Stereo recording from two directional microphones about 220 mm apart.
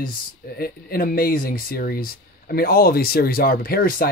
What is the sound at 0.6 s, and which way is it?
Speech, 40° left (ahead or behind).